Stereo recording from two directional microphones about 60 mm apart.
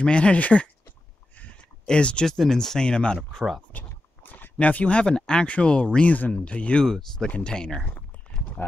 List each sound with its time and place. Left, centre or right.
0.0 s speech: centre
1.4 s a sound: centre
2.2 s speech: centre
3.7 s speech: left; by 7.8 s centre
8.6 s speech: left